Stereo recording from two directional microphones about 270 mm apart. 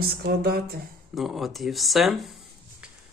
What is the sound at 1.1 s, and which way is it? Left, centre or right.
Speech, centre.